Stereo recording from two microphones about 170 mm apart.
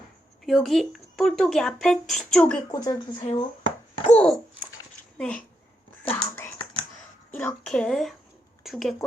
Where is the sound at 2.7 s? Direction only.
20° left (ahead or behind).